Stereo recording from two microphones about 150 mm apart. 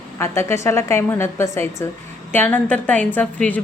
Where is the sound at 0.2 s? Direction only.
15° left (ahead or behind).